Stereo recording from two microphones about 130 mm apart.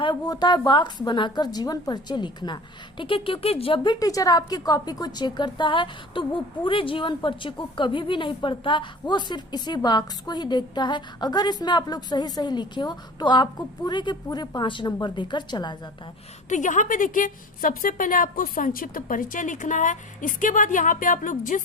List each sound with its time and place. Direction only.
0.0 s a woman's voice: 35° left (ahead or behind); by 3.8 s 50° left (ahead or behind)
3.8 s a woman's voice: 30° left (ahead or behind)
16.5 s a woman's voice: 75° left (ahead or behind); by 21.6 s 90° left